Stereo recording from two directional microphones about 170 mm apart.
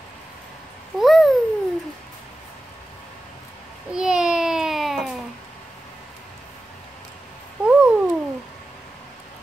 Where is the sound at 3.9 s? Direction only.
5° right (ahead or behind).